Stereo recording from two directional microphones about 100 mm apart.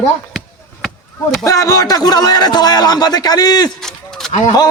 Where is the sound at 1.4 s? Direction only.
35° left (ahead or behind).